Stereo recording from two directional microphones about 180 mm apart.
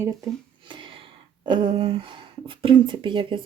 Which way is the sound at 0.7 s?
30° right (ahead or behind).